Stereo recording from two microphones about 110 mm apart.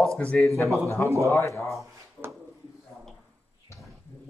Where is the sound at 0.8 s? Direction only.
25° left (ahead or behind).